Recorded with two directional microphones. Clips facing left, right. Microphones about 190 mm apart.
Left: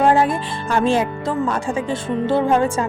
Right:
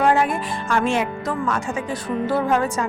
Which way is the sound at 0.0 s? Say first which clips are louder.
Left 3 dB; 30° left (ahead or behind).